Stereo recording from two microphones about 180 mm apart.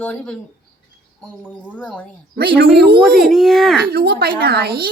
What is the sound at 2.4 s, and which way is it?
Speech, 60° right (ahead or behind).